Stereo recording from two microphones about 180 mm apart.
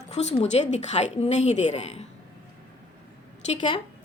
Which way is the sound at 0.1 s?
40° left (ahead or behind).